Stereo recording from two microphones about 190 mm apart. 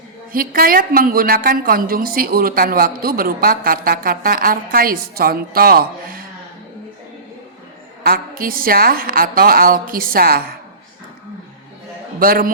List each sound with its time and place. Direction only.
0.3 s a woman's voice: 50° right (ahead or behind)
8.0 s a woman's voice: 50° right (ahead or behind)
12.2 s a woman's voice: 50° right (ahead or behind)